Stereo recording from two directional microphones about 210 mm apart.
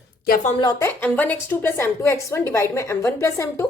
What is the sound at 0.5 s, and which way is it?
A woman's voice, 20° left (ahead or behind).